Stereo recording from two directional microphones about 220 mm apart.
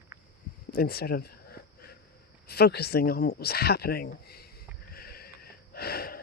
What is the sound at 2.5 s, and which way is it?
Speech, 45° left (ahead or behind).